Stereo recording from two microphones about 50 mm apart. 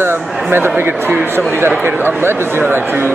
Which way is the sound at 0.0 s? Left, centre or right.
Right.